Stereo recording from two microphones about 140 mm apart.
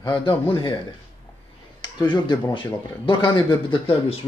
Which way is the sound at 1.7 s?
35° left (ahead or behind).